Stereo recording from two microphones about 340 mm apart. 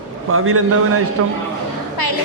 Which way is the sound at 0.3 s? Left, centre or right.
Right.